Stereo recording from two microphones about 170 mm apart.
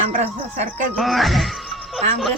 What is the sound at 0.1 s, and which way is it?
Music, 45° right (ahead or behind).